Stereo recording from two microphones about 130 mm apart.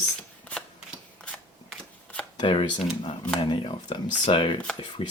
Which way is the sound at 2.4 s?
45° left (ahead or behind).